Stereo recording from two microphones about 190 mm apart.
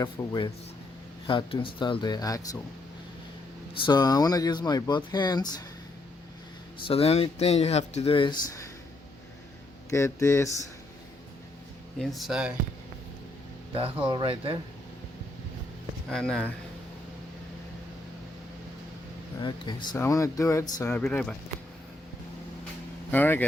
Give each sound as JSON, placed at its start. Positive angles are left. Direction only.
{"t": 0.0, "sound": "speech", "side_deg": 25}
{"t": 3.8, "sound": "speech", "side_deg": 25}
{"t": 6.8, "sound": "speech", "side_deg": 30}
{"t": 9.9, "sound": "speech", "side_deg": 15}
{"t": 11.9, "sound": "speech", "side_deg": 0}
{"t": 13.7, "sound": "speech", "side_deg": -30}
{"t": 16.0, "sound": "speech", "side_deg": 5}
{"t": 19.4, "sound": "speech", "side_deg": 25}
{"t": 23.1, "sound": "speech", "side_deg": 10}